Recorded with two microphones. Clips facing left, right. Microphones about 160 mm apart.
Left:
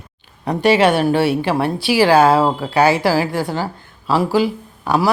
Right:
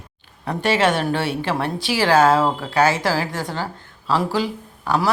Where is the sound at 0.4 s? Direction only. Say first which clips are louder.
Left 5 dB; 15° left (ahead or behind).